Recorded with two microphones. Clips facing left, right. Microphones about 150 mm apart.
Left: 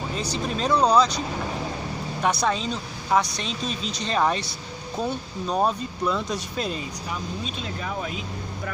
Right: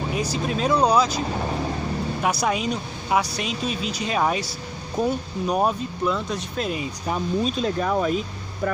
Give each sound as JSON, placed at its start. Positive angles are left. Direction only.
{"t": 0.1, "sound": "a woman's voice", "side_deg": -10}
{"t": 2.4, "sound": "a woman's voice", "side_deg": -10}
{"t": 7.1, "sound": "speech", "side_deg": -45}